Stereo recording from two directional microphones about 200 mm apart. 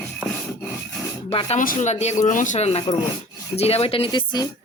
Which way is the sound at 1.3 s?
30° left (ahead or behind).